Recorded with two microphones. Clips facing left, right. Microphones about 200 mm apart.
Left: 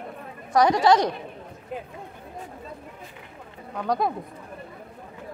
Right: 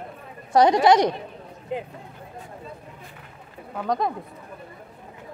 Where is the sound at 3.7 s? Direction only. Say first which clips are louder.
Even; centre (ahead or behind).